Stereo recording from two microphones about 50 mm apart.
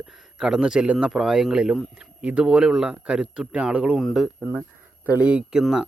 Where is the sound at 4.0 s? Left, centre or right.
Centre.